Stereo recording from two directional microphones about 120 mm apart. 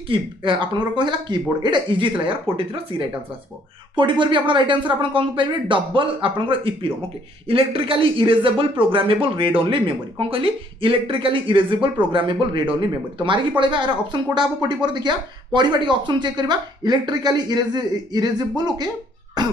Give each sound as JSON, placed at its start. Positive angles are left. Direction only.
{"t": 0.1, "sound": "speech", "side_deg": -45}
{"t": 19.4, "sound": "cough", "side_deg": -35}